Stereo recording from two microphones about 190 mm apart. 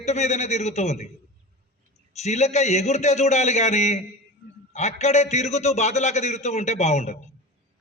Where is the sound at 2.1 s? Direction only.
35° left (ahead or behind).